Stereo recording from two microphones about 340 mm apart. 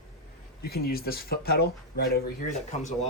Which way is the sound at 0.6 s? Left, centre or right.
Left.